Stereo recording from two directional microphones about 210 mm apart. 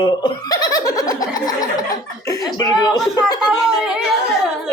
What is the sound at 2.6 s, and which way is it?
Speech, 20° left (ahead or behind).